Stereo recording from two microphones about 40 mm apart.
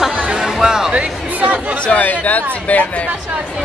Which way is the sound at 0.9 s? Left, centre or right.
Right.